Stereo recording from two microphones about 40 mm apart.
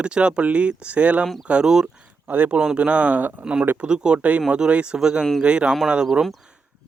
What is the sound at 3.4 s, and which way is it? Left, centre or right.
Speech, centre.